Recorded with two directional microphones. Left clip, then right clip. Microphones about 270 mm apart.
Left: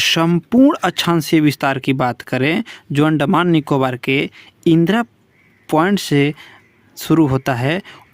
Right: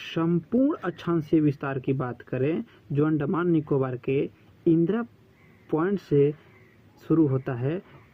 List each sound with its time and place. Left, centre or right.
0.0 s speech: left